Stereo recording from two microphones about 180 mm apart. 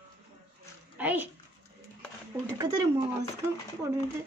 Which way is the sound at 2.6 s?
20° right (ahead or behind).